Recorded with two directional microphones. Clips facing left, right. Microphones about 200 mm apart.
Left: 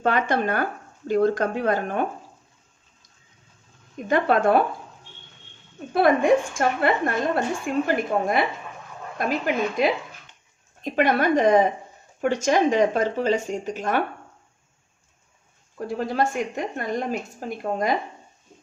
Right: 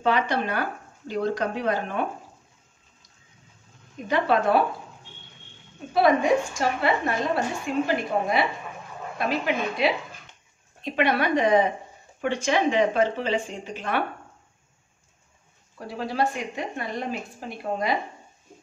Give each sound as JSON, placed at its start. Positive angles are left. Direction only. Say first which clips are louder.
{"t": 0.0, "sound": "a woman's voice", "louder": "left 2 dB", "side_deg": 50}
{"t": 4.1, "sound": "a woman's voice", "louder": "left 2 dB", "side_deg": 50}
{"t": 5.9, "sound": "a woman's voice", "louder": "left 2 dB", "side_deg": 50}
{"t": 9.8, "sound": "a woman's voice", "louder": "left 2 dB", "side_deg": 45}
{"t": 15.9, "sound": "a woman's voice", "louder": "left 2 dB", "side_deg": 45}